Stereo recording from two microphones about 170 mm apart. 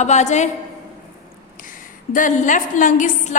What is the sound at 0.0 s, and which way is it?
Speech, 45° left (ahead or behind).